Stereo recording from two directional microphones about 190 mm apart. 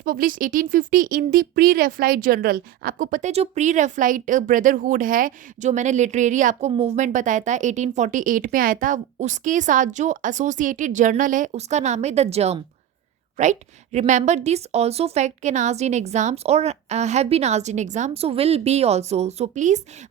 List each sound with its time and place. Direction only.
0.0 s speech: 45° right (ahead or behind)